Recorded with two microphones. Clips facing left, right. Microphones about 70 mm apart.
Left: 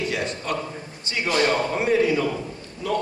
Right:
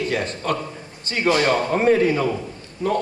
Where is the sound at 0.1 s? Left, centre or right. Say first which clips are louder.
Right 3 dB; right.